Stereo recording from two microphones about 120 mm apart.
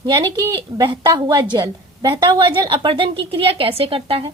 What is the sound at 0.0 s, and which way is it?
A woman's voice, 35° right (ahead or behind).